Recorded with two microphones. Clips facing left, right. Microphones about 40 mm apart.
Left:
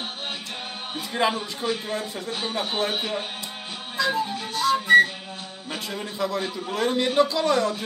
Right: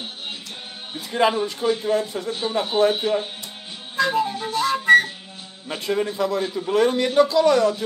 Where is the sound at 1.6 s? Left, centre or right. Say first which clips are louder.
Right 6 dB; left.